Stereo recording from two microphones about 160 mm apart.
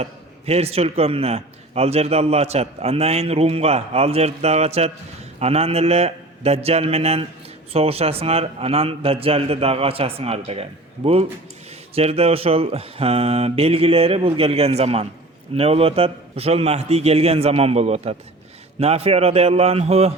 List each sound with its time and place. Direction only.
0.0 s a man's voice: 40° right (ahead or behind)